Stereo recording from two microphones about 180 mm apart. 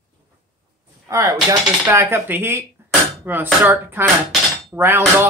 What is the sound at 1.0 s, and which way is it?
Speech, 15° right (ahead or behind).